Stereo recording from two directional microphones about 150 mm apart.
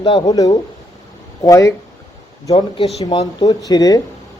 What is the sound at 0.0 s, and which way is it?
Speech, 30° left (ahead or behind).